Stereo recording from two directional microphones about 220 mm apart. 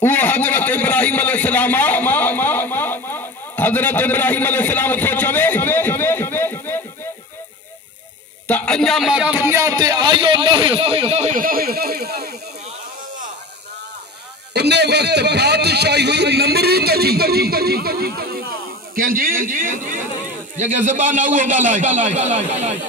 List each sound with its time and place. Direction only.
0.0 s a sound: 10° left (ahead or behind)
8.5 s a man's voice: 5° left (ahead or behind); by 12.4 s 45° right (ahead or behind)
14.5 s a man's voice: 50° right (ahead or behind); by 22.3 s 35° right (ahead or behind)